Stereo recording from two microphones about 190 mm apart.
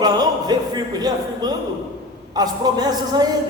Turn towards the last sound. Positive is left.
turn(degrees=-20)  # may be behind; listen again after turning